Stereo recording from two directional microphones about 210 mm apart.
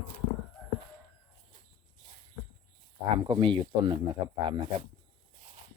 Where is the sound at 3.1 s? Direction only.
25° right (ahead or behind).